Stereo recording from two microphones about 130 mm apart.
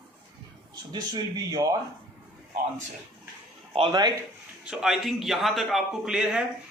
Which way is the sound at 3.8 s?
30° right (ahead or behind).